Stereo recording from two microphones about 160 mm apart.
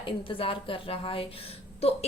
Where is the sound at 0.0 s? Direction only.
35° left (ahead or behind).